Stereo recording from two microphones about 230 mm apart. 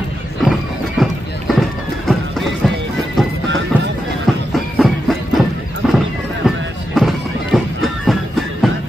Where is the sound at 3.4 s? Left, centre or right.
Right.